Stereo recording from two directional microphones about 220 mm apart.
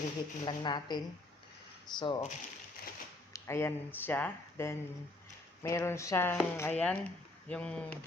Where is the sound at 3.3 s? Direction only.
10° left (ahead or behind).